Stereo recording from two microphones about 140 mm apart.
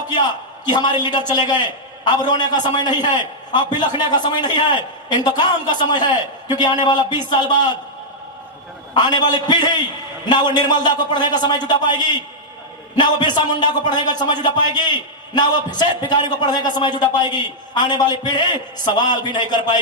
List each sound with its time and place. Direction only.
0.1 s a man's voice: 30° left (ahead or behind)
9.0 s a man's voice: 30° left (ahead or behind)